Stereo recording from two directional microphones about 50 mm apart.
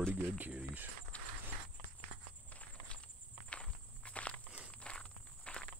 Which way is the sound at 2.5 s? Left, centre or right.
Left.